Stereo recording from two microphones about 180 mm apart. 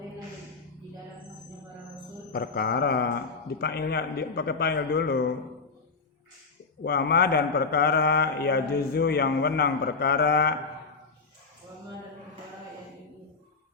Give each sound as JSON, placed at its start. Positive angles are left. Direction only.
{"t": 2.3, "sound": "a man's voice", "side_deg": 60}
{"t": 6.8, "sound": "a man's voice", "side_deg": 65}